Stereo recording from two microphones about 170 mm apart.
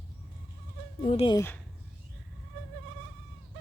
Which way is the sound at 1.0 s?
40° left (ahead or behind).